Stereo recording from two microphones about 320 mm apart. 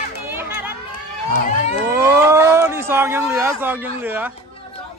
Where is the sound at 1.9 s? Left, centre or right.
Centre.